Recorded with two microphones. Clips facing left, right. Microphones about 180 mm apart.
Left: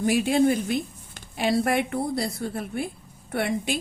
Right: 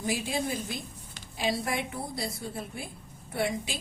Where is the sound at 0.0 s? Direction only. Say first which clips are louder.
Left 10 dB; 65° left (ahead or behind).